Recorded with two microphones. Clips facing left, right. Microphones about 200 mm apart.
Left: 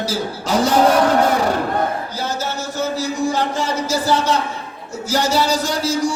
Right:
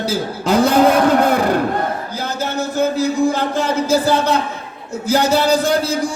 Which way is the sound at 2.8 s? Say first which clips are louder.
Right 5 dB; 55° right (ahead or behind).